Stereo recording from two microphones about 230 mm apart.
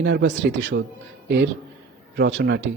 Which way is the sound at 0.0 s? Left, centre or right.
Right.